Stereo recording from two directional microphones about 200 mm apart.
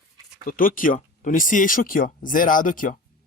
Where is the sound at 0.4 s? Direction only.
45° left (ahead or behind).